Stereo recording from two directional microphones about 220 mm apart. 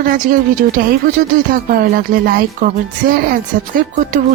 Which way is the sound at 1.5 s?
45° right (ahead or behind).